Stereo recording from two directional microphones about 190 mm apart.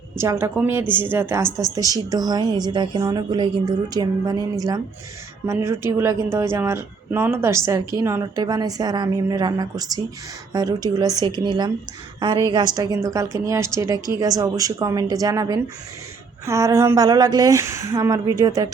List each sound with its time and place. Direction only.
0.2 s a woman's voice: 15° right (ahead or behind)